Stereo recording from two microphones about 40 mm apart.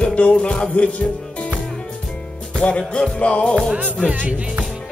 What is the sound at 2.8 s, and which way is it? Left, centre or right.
Music, centre.